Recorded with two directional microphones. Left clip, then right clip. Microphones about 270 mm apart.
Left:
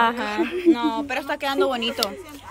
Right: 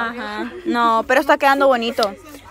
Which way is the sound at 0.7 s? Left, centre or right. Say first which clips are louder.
Right 11 dB; centre.